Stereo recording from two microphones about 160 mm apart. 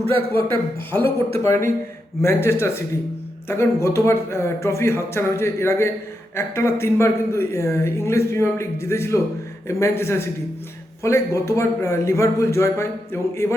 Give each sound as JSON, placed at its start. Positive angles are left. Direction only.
{"t": 0.4, "sound": "a man's voice", "side_deg": 10}